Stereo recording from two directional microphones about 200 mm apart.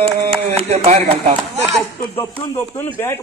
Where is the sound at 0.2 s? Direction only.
30° right (ahead or behind).